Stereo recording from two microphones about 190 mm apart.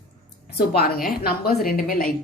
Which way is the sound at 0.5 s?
55° left (ahead or behind).